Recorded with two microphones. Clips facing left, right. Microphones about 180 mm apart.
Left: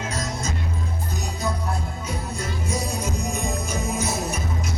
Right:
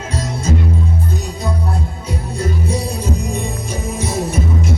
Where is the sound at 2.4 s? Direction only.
30° right (ahead or behind).